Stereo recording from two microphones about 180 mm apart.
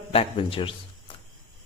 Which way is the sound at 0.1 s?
30° left (ahead or behind).